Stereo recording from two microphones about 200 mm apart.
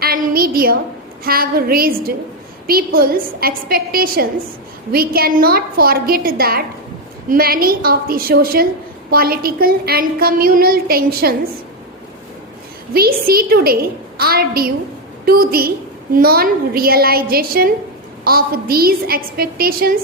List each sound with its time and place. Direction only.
0.0 s a sound: 50° right (ahead or behind)
1.2 s a woman's voice: 50° right (ahead or behind)
12.9 s a woman's voice: 50° right (ahead or behind)